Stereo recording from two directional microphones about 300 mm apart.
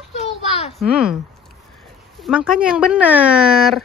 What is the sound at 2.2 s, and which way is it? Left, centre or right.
Speech, centre.